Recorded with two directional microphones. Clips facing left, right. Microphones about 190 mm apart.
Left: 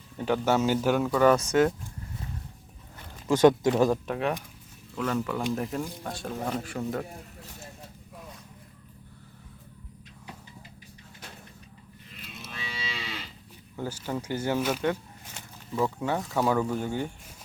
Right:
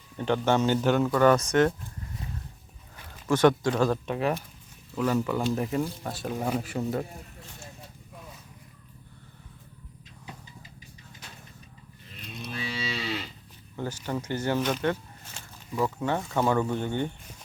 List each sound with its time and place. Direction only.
0.2 s speech: 5° left (ahead or behind)
3.2 s speech: 20° left (ahead or behind)
4.0 s speech: centre (ahead or behind)
12.5 s moo: 35° right (ahead or behind)
13.7 s speech: 10° left (ahead or behind)